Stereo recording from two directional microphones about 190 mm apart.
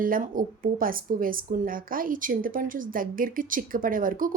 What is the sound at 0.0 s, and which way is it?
Speech, 45° right (ahead or behind).